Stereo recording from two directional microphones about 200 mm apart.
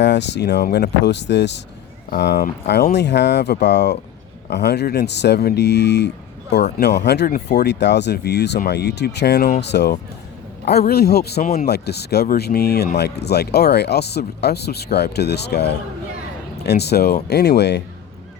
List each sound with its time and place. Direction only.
0.0 s speech: 60° left (ahead or behind)